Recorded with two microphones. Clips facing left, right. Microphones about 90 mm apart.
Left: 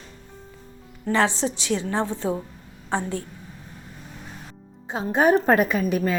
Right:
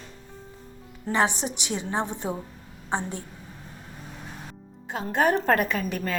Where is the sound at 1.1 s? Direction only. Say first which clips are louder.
Left 3 dB; 15° right (ahead or behind).